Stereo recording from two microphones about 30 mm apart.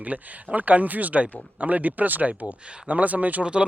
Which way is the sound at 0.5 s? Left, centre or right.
Right.